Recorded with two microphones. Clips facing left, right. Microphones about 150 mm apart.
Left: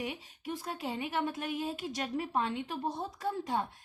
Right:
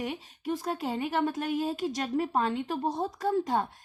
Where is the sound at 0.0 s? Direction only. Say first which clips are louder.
Right 5 dB; 45° right (ahead or behind).